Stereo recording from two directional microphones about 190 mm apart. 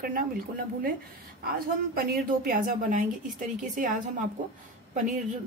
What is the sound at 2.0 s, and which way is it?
Speech, 50° right (ahead or behind).